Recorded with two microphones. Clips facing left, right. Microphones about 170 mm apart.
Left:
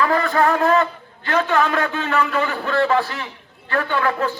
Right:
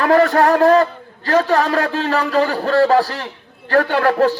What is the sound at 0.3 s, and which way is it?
A man's voice, 40° right (ahead or behind).